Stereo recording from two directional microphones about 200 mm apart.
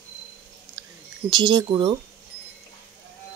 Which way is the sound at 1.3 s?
20° right (ahead or behind).